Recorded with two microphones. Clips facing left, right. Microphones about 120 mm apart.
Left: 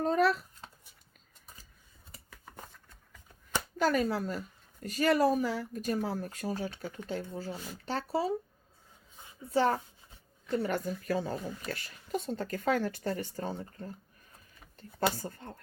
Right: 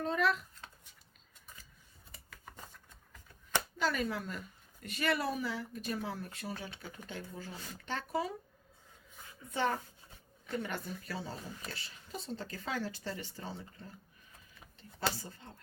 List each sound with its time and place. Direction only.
0.0 s a sound: 40° left (ahead or behind)
3.8 s speech: 45° left (ahead or behind)
9.5 s a woman's voice: 35° left (ahead or behind)
15.2 s a woman's voice: 55° left (ahead or behind)